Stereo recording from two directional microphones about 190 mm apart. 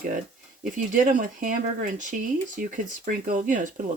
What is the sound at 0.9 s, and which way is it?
Speech, 45° right (ahead or behind).